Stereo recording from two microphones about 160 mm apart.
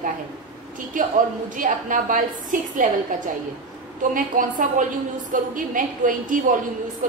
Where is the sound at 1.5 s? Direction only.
55° right (ahead or behind).